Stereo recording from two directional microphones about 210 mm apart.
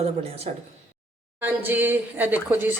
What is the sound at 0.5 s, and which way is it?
Speech, 30° right (ahead or behind).